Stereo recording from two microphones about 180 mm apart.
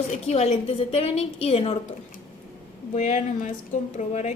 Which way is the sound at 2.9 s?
40° left (ahead or behind).